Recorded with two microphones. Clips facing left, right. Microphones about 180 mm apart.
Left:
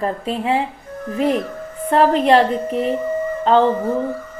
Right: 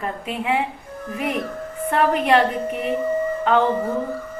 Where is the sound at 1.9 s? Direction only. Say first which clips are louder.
Left 4 dB; 30° left (ahead or behind).